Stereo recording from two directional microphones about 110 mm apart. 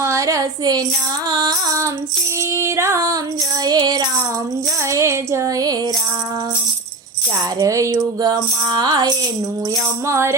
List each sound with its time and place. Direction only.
0.0 s a woman's voice: 30° right (ahead or behind)
1.3 s music: 35° right (ahead or behind)
2.6 s female singing: 25° right (ahead or behind)
3.6 s music: 35° right (ahead or behind)
4.9 s female singing: 25° right (ahead or behind)
7.6 s music: 30° right (ahead or behind)
10.1 s female singing: 25° right (ahead or behind)